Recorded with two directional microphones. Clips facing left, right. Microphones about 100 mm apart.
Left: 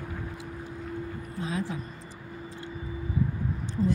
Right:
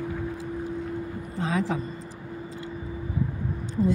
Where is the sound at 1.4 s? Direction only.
90° right.